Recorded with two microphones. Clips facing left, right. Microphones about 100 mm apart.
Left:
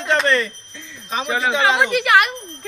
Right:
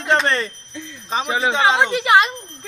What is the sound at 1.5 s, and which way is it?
Speech, 25° right (ahead or behind).